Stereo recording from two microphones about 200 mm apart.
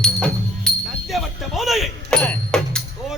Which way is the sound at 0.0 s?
5° left (ahead or behind).